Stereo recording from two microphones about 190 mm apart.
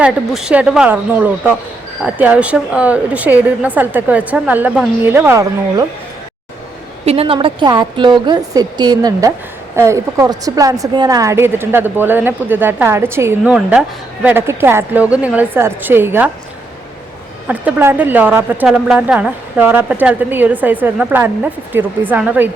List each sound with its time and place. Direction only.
0.0 s a woman's voice: 5° right (ahead or behind)
7.0 s a woman's voice: 30° right (ahead or behind); by 16.3 s 10° right (ahead or behind)
17.5 s a woman's voice: 10° right (ahead or behind)